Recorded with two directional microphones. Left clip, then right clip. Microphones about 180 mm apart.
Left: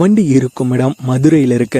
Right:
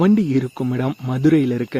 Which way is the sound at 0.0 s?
40° left (ahead or behind).